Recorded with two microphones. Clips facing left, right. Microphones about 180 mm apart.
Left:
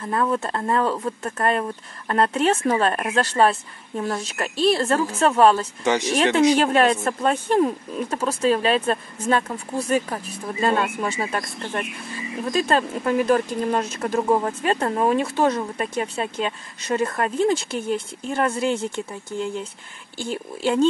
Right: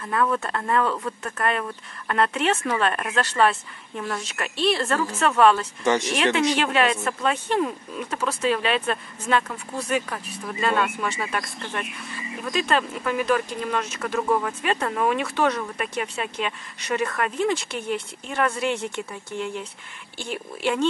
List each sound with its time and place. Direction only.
0.0 s speech: 30° left (ahead or behind)
6.5 s speech: 40° left (ahead or behind)